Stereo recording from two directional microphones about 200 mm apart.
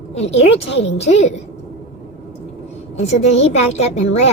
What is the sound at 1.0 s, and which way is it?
Speech, 30° left (ahead or behind).